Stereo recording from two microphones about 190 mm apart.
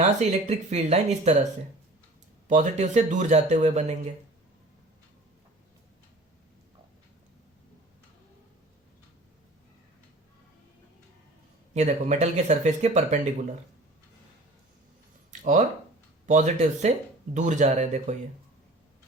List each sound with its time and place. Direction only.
0.0 s speech: 40° right (ahead or behind)
2.5 s speech: 40° right (ahead or behind)
11.7 s speech: 40° right (ahead or behind)
15.3 s a sound: 40° right (ahead or behind)
16.2 s speech: 40° right (ahead or behind)